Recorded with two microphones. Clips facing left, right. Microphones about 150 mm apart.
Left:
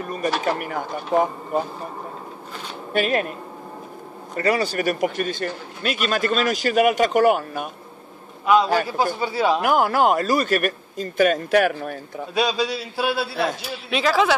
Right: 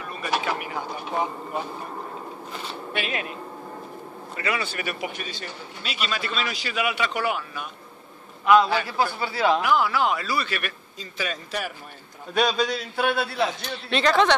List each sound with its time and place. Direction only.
0.0 s a man's voice: 45° left (ahead or behind)
2.9 s a man's voice: 45° left (ahead or behind)
4.4 s a man's voice: 40° left (ahead or behind)
9.2 s a man's voice: 15° left (ahead or behind)
9.6 s a man's voice: 50° left (ahead or behind); by 12.0 s 65° left (ahead or behind)
12.4 s a man's voice: 5° left (ahead or behind)